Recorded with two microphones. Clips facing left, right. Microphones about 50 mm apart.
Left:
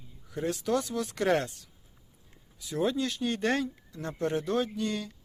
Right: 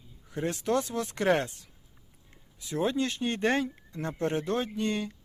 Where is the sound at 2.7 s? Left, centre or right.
Right.